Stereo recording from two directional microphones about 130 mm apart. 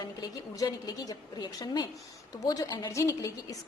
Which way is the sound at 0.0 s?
30° left (ahead or behind).